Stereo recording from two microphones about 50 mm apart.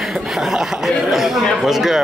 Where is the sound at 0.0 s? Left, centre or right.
Centre.